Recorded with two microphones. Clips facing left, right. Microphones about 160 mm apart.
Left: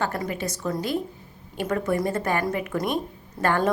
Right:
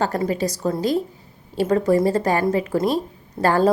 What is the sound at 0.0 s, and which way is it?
Speech, 35° right (ahead or behind).